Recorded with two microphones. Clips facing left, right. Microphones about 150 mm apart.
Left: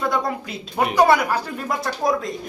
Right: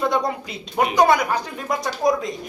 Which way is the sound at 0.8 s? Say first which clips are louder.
Even; centre (ahead or behind).